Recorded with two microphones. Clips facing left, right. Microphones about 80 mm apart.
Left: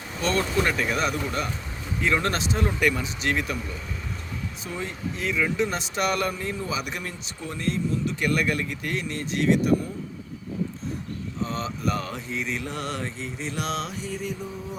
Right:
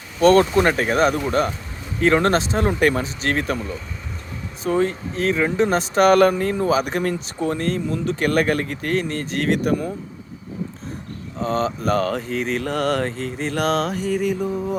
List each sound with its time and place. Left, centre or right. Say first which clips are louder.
0.2 s speech: right 11 dB; right
4.6 s speech: right 14 dB; right
11.4 s speech: right 8 dB; right